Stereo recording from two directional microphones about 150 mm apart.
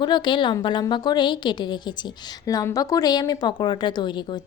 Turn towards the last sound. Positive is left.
turn(degrees=30)  # may be behind; listen again after turning